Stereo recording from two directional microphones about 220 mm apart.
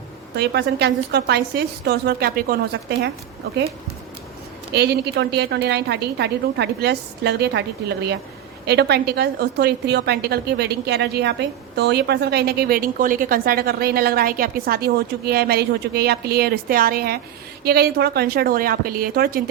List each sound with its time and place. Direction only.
0.3 s a woman's voice: 50° right (ahead or behind)
4.7 s a woman's voice: 50° right (ahead or behind)